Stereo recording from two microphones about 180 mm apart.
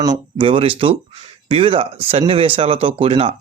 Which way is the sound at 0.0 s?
25° right (ahead or behind).